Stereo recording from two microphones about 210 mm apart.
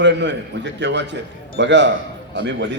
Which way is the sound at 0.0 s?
55° right (ahead or behind).